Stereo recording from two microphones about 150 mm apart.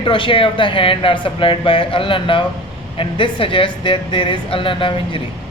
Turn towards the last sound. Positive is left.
turn(degrees=35)  # may be behind; listen again after turning